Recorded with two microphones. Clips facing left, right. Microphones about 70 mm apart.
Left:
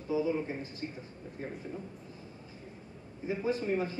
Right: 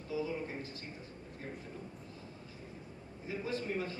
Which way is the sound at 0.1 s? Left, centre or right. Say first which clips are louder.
Left 6 dB; left.